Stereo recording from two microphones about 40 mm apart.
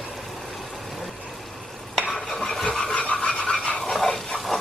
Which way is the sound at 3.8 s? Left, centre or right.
Centre.